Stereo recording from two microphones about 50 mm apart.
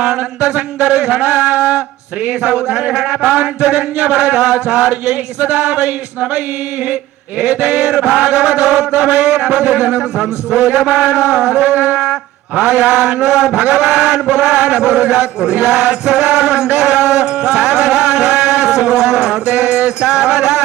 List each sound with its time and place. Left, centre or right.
0.5 s speech: right
7.6 s a man's voice: right
16.8 s music: centre